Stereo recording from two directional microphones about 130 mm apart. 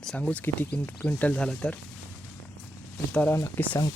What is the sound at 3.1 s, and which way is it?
Speech, 10° left (ahead or behind).